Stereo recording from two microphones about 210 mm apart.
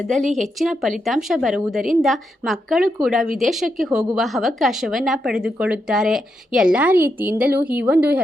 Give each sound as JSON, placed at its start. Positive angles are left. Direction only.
{"t": 0.2, "sound": "speech", "side_deg": -35}
{"t": 0.4, "sound": "a woman's voice", "side_deg": 0}